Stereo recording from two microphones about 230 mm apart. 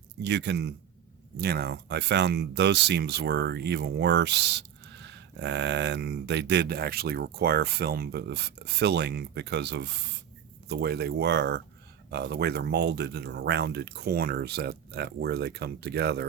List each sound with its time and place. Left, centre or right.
0.2 s speech: right